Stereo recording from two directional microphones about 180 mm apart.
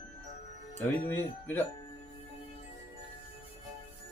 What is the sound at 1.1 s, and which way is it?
Speech, 10° left (ahead or behind).